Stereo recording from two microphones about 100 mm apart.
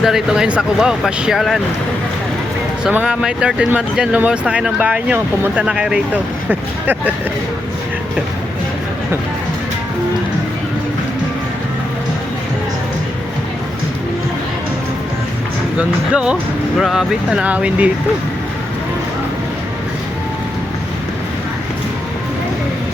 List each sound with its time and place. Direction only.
0.0 s speech: 5° right (ahead or behind)
2.9 s speech: 15° right (ahead or behind)
15.8 s speech: 10° right (ahead or behind)